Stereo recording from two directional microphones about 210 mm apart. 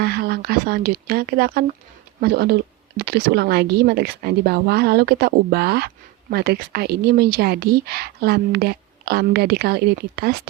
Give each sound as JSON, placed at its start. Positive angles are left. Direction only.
{"t": 0.0, "sound": "speech", "side_deg": -50}